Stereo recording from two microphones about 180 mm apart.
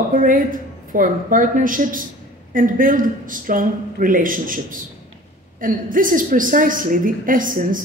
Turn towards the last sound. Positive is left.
turn(degrees=-50)  # may be behind; listen again after turning